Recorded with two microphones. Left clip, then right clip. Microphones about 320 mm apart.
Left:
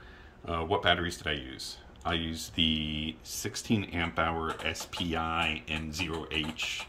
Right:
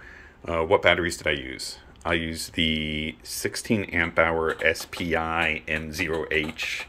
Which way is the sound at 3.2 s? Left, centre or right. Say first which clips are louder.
Right 7 dB; centre.